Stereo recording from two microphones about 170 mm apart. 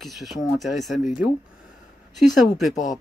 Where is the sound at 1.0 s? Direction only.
50° left (ahead or behind).